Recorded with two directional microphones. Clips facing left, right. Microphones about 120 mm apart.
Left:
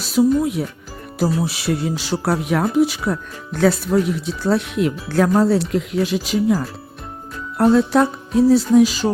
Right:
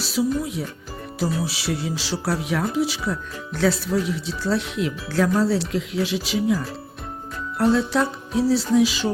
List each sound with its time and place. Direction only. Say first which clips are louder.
0.0 s speech: left 7 dB; 50° left (ahead or behind)
7.6 s speech: left 5 dB; 50° left (ahead or behind)